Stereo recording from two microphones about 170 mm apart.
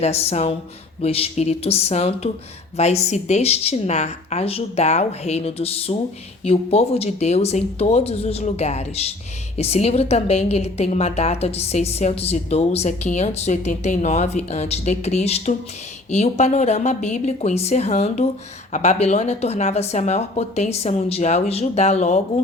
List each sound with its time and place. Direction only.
0.0 s a woman's voice: 40° left (ahead or behind)